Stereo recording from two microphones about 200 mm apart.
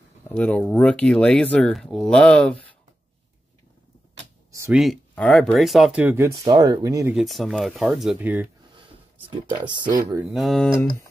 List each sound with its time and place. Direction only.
0.2 s speech: 5° left (ahead or behind)
4.6 s speech: centre (ahead or behind)
7.2 s speech: centre (ahead or behind)
9.6 s speech: 20° right (ahead or behind)
10.3 s speech: centre (ahead or behind)